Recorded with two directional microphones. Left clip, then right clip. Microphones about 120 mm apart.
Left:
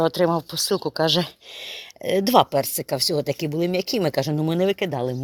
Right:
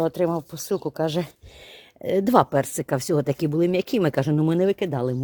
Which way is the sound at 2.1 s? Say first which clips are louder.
Left 1 dB; 50° right (ahead or behind).